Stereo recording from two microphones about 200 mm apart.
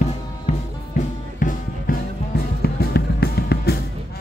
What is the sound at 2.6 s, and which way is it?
Music, 55° left (ahead or behind).